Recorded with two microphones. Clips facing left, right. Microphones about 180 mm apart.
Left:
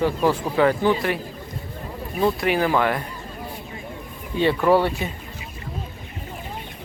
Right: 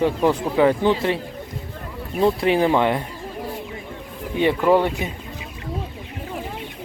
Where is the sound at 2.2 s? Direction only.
25° right (ahead or behind).